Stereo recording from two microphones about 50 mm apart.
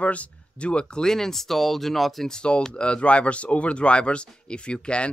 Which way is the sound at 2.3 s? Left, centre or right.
Centre.